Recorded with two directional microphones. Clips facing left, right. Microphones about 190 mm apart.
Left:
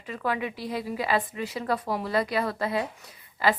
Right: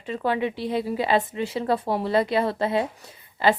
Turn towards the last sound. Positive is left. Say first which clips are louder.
# right 4 dB
turn(degrees=-25)  # may be behind; listen again after turning